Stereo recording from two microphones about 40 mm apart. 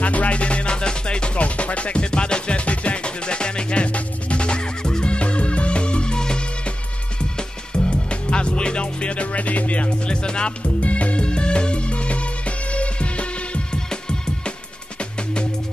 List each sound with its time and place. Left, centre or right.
0.0 s music: left
10.8 s music: left
13.8 s music: centre